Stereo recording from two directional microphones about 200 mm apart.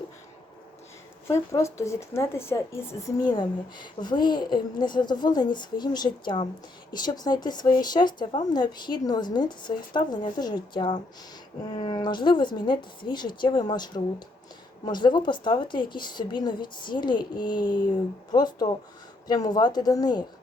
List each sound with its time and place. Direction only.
1.3 s speech: 15° left (ahead or behind)